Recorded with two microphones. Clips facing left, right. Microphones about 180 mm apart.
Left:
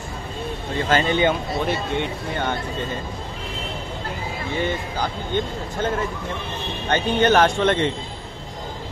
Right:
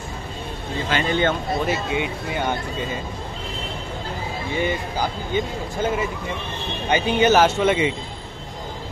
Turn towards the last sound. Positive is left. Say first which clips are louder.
# right 1 dB
turn(degrees=-10)  # may be behind; listen again after turning